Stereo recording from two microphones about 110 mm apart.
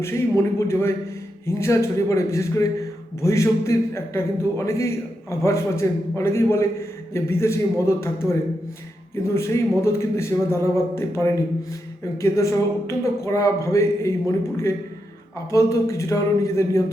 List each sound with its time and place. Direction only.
0.7 s a man's voice: 25° left (ahead or behind)